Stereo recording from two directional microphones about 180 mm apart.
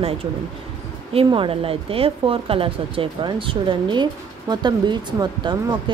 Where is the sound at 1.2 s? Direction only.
30° right (ahead or behind).